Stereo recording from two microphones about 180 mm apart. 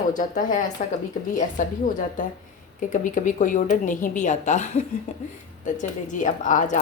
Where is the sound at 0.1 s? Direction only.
45° left (ahead or behind).